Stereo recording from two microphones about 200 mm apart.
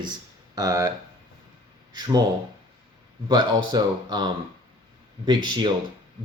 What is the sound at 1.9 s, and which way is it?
Speech, 20° right (ahead or behind).